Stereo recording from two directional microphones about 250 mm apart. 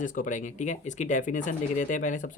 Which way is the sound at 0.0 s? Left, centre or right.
Left.